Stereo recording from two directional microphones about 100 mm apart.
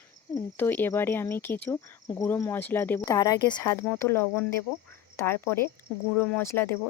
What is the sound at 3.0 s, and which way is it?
Speech, 35° left (ahead or behind).